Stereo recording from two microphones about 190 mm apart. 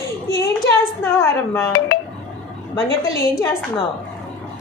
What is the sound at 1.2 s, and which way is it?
Speech, 15° left (ahead or behind).